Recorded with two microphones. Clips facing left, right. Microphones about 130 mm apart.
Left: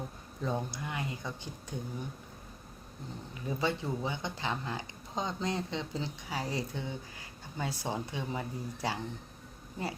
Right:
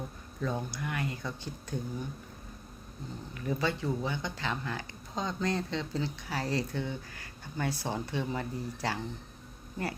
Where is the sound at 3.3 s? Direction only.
20° left (ahead or behind).